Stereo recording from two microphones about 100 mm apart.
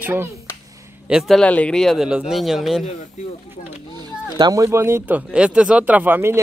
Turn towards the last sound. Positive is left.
turn(degrees=-20)  # may be behind; listen again after turning